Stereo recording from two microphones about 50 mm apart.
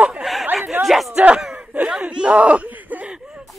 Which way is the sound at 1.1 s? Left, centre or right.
Right.